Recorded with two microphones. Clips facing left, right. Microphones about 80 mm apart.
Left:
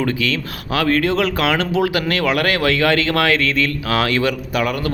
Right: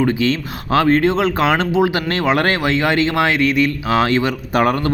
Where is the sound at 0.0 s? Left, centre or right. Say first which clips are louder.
Right 4 dB; right.